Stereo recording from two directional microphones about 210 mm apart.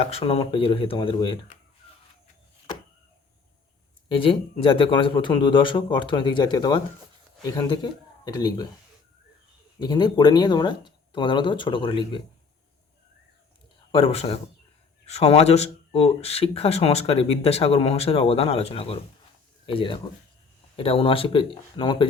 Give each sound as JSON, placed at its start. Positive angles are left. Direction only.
{"t": 0.0, "sound": "speech", "side_deg": 30}
{"t": 4.1, "sound": "speech", "side_deg": 25}
{"t": 9.8, "sound": "speech", "side_deg": 20}
{"t": 13.9, "sound": "speech", "side_deg": 30}